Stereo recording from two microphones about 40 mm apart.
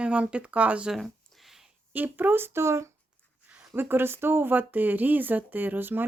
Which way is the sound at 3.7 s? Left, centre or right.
Right.